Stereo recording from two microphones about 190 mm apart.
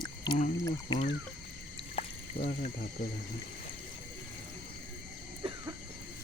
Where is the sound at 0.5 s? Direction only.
15° left (ahead or behind).